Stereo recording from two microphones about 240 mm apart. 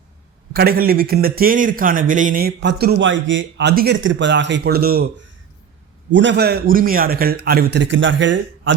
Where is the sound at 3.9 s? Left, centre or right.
Right.